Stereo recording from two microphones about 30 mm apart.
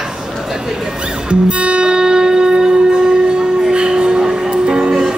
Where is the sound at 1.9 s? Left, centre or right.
Right.